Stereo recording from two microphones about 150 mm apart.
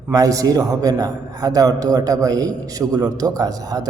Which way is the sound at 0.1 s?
25° right (ahead or behind).